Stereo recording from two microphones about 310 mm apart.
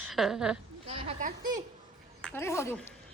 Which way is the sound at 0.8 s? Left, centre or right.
Centre.